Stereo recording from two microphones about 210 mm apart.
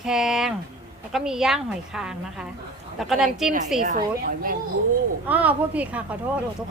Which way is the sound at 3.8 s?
40° right (ahead or behind).